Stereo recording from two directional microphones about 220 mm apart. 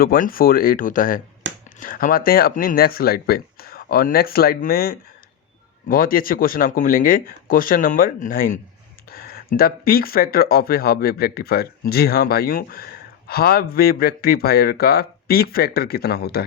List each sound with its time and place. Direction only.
0.0 s speech: 40° left (ahead or behind)